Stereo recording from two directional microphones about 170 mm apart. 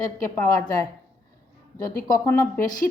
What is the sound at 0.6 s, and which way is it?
Speech, 20° left (ahead or behind).